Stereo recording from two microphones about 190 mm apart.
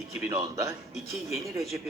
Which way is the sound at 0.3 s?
15° right (ahead or behind).